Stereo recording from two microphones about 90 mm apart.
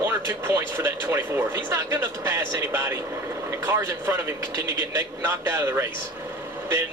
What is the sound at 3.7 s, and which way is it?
Speech, 30° right (ahead or behind).